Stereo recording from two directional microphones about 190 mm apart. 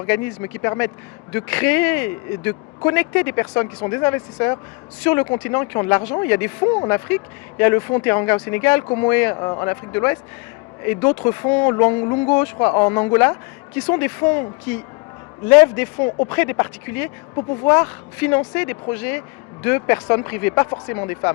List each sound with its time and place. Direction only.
0.0 s speech: 15° left (ahead or behind)
16.0 s speech: 30° left (ahead or behind)
16.3 s speech: 10° left (ahead or behind)